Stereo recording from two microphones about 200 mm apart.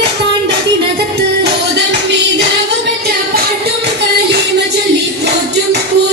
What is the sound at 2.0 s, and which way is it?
Music, 60° right (ahead or behind).